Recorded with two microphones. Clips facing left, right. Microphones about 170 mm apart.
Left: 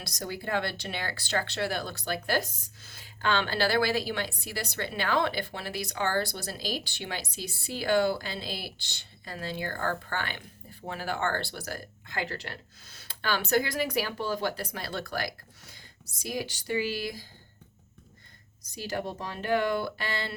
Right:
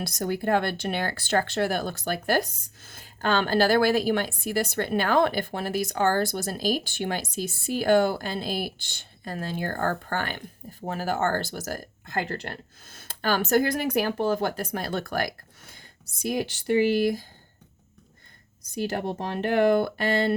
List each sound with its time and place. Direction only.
0.0 s a woman's voice: 55° right (ahead or behind)
18.7 s speech: 55° right (ahead or behind)